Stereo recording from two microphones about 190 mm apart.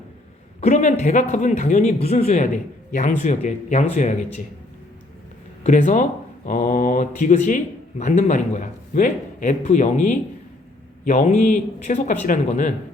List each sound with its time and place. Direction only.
0.6 s speech: 40° left (ahead or behind)
5.6 s speech: 40° left (ahead or behind)